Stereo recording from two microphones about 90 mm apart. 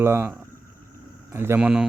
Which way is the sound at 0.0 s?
30° right (ahead or behind).